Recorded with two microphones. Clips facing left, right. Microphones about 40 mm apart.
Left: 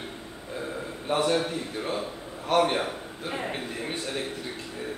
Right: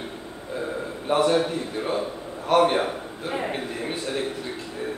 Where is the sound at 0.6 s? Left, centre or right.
Centre.